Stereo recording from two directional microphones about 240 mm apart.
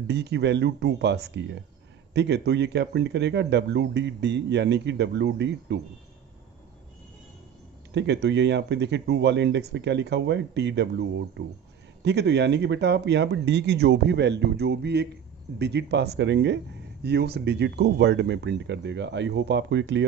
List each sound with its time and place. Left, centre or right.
0.0 s speech: right
7.9 s speech: right